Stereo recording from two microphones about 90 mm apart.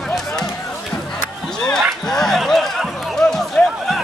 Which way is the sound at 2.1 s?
5° left (ahead or behind).